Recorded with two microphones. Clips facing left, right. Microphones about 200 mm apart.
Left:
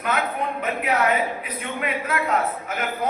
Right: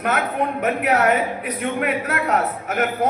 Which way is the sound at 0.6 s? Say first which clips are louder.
Right 4 dB; 70° right (ahead or behind).